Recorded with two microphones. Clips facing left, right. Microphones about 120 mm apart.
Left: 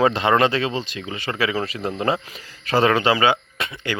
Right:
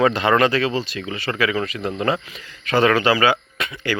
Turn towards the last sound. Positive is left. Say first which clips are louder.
# right 2 dB
turn(degrees=25)  # may be behind; listen again after turning